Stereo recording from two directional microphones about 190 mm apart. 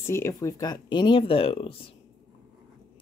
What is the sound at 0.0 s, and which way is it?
Speech, 15° left (ahead or behind).